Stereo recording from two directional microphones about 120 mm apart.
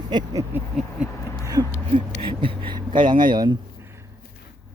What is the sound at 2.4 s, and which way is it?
Speech, 45° right (ahead or behind).